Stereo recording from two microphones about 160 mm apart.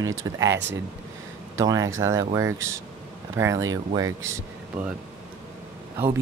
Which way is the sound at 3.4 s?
20° right (ahead or behind).